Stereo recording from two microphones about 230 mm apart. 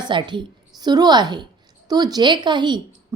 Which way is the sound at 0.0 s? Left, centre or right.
Centre.